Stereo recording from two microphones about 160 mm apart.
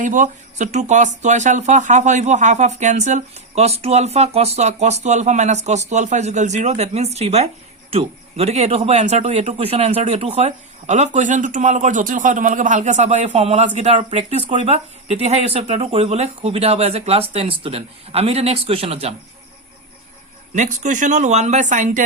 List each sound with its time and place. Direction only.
0.0 s speech: 55° right (ahead or behind)
20.6 s speech: 50° right (ahead or behind)